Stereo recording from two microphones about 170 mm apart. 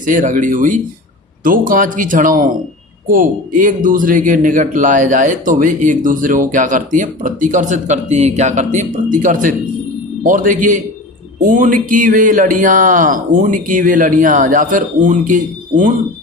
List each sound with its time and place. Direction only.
0.0 s speech: 50° right (ahead or behind)